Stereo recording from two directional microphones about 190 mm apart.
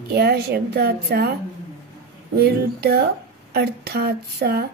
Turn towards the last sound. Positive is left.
turn(degrees=-55)  # may be behind; listen again after turning